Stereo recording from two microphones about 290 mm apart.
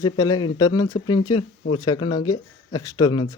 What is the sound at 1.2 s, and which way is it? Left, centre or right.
Speech, left.